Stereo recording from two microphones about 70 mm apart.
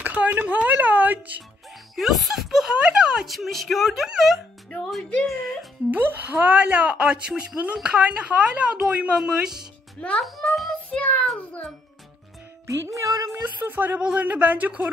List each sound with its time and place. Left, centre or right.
0.0 s speech: right
2.0 s speech: centre
5.9 s a woman's voice: right; by 10.8 s centre
10.9 s music: left
12.6 s music: right
13.6 s a woman's voice: right